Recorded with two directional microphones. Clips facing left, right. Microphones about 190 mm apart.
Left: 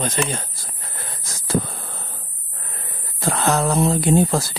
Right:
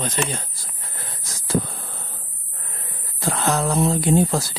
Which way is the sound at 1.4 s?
60° left (ahead or behind).